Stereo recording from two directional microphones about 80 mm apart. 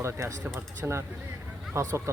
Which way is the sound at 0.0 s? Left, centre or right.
Right.